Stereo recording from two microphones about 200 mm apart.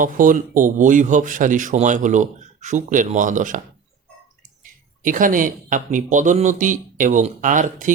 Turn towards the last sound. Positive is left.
turn(degrees=-40)  # may be behind; listen again after turning